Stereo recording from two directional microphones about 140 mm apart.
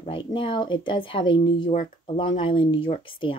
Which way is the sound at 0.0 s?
40° left (ahead or behind).